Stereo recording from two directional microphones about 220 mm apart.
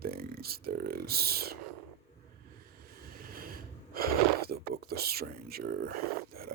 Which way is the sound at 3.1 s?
40° right (ahead or behind).